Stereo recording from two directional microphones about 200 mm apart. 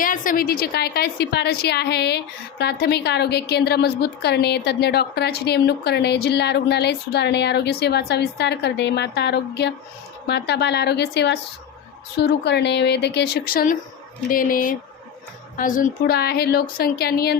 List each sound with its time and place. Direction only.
0.0 s a woman's voice: 45° left (ahead or behind)